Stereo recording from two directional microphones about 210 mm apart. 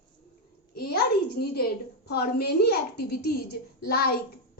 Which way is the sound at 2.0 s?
50° left (ahead or behind).